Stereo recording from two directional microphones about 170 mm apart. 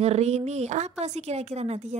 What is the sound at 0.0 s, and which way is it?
A woman's voice, 40° right (ahead or behind).